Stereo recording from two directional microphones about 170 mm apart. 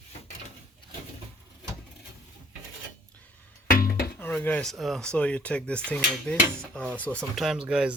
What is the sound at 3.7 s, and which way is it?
Music, 55° left (ahead or behind).